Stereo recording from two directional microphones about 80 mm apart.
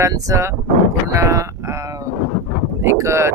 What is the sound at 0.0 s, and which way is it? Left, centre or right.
Speech, right.